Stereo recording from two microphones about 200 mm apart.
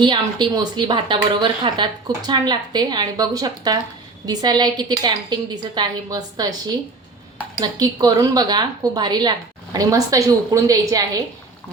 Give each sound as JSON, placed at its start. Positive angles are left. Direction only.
{"t": 0.0, "sound": "a woman's voice", "side_deg": -25}